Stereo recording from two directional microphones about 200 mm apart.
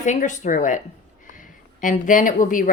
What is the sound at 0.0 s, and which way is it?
Speech, 40° left (ahead or behind).